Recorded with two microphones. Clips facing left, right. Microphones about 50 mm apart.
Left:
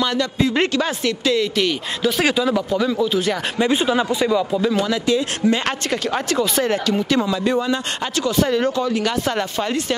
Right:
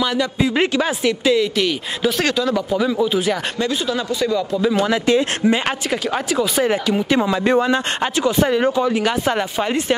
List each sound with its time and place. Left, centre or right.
0.0 s speech: centre
2.2 s speech: centre
2.7 s speech: centre
3.5 s speech: left
4.4 s speech: centre
4.8 s speech: right
5.4 s speech: centre
5.9 s speech: centre
7.2 s speech: right
8.2 s speech: centre